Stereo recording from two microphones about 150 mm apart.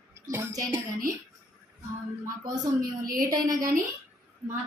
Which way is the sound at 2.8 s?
75° right (ahead or behind).